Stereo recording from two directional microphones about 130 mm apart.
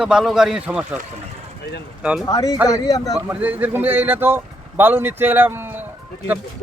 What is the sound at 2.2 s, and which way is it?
Speech, 30° left (ahead or behind).